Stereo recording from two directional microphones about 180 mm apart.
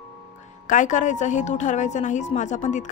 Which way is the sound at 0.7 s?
45° left (ahead or behind).